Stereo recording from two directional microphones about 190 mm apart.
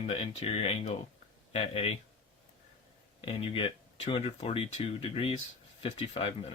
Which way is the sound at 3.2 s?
30° left (ahead or behind).